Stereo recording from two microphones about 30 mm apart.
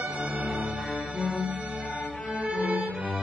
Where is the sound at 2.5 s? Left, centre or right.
Right.